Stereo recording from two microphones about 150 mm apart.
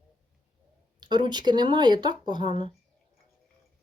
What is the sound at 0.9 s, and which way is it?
Speech, 30° right (ahead or behind).